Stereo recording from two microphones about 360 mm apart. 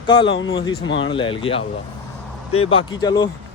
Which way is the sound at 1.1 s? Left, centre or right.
Centre.